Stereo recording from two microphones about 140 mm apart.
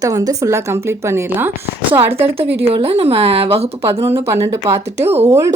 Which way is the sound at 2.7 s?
45° right (ahead or behind).